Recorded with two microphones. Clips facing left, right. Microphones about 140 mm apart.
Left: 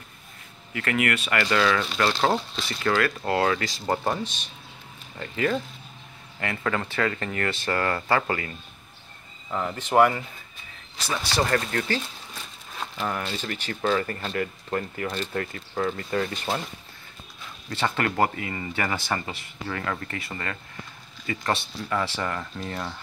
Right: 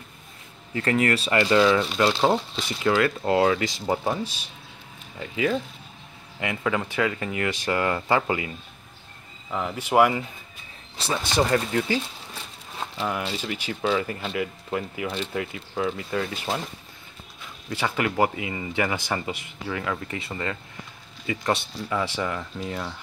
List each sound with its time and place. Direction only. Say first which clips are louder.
0.7 s speech: right 3 dB; 30° right (ahead or behind)
3.8 s speech: right 1 dB; 5° right (ahead or behind)
11.0 s speech: right 2 dB; 25° right (ahead or behind)
13.0 s speech: right 1 dB; 10° right (ahead or behind)
17.6 s speech: even; 10° right (ahead or behind)
20.2 s speech: right 3 dB; 20° right (ahead or behind)